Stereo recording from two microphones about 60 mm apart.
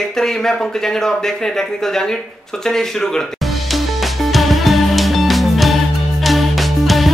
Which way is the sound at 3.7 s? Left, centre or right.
Centre.